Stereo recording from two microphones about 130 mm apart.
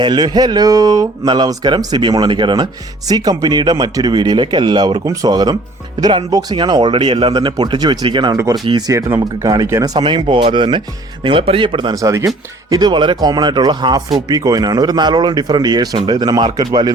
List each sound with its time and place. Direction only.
0.0 s speech: 35° right (ahead or behind)
11.9 s speech: 25° right (ahead or behind)